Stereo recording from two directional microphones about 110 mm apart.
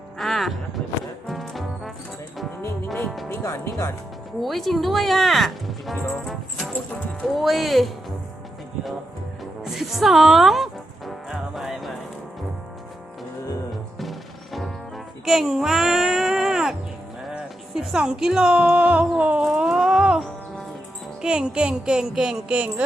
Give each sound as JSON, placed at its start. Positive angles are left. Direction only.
{"t": 0.2, "sound": "music", "side_deg": 0}
{"t": 3.2, "sound": "music", "side_deg": 25}
{"t": 4.4, "sound": "speech", "side_deg": 0}
{"t": 9.4, "sound": "music", "side_deg": 0}
{"t": 14.0, "sound": "music", "side_deg": 0}
{"t": 15.2, "sound": "child singing", "side_deg": -5}
{"t": 17.2, "sound": "a sound", "side_deg": -5}
{"t": 21.2, "sound": "speech", "side_deg": -5}